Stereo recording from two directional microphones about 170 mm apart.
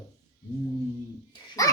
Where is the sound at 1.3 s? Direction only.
20° left (ahead or behind).